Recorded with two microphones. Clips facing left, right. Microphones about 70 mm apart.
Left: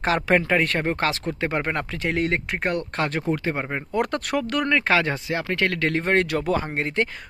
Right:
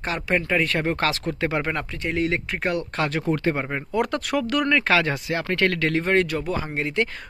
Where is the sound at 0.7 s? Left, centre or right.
Left.